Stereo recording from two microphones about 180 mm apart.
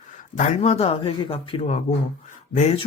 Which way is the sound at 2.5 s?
40° left (ahead or behind).